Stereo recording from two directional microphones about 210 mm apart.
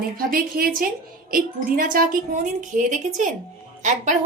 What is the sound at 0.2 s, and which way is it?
A woman's voice, 45° right (ahead or behind).